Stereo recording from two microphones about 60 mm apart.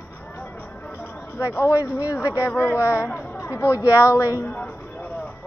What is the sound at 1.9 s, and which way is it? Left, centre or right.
Speech, left.